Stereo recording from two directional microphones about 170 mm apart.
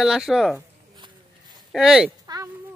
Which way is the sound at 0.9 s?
25° right (ahead or behind).